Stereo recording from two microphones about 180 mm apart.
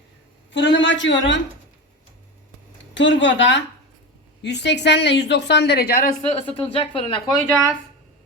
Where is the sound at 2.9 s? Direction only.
90° left.